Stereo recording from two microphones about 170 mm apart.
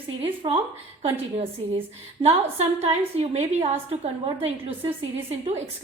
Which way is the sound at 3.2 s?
40° right (ahead or behind).